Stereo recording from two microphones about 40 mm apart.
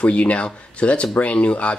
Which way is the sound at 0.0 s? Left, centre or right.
Left.